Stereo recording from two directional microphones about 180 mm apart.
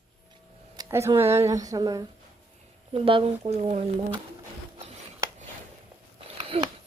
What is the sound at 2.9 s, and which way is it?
Speech, 30° right (ahead or behind).